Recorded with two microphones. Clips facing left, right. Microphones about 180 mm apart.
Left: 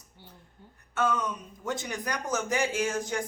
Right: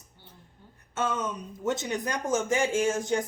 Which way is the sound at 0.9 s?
20° right (ahead or behind).